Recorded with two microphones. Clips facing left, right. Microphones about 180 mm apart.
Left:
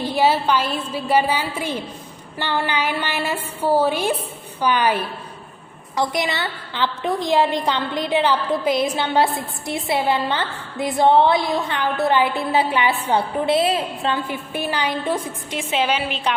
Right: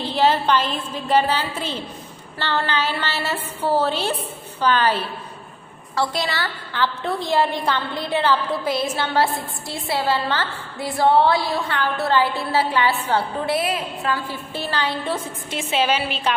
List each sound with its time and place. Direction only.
0.0 s a woman's voice: 10° left (ahead or behind)